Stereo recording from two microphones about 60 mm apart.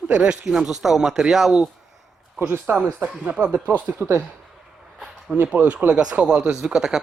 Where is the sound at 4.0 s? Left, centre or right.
Right.